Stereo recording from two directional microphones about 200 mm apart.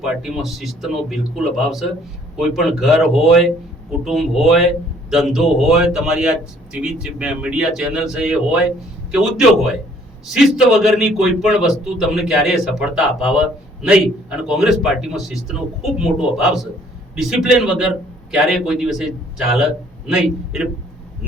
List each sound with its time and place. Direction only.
0.0 s a man's voice: centre (ahead or behind)